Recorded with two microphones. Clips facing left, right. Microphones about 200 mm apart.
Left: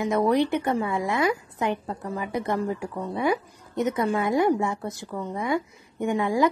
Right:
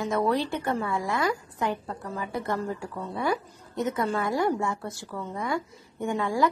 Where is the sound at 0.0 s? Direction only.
15° left (ahead or behind).